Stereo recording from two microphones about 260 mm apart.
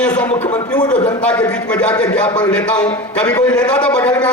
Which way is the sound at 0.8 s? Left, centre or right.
Left.